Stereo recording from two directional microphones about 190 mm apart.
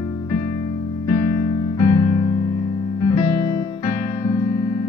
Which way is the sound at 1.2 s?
25° left (ahead or behind).